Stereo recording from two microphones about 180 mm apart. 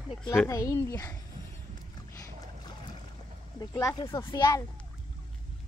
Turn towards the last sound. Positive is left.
turn(degrees=20)  # may be behind; listen again after turning